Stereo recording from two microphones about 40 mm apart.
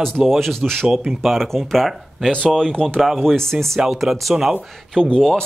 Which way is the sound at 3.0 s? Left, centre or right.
Centre.